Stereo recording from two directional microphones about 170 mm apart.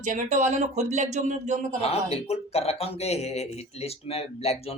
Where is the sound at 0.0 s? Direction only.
45° right (ahead or behind).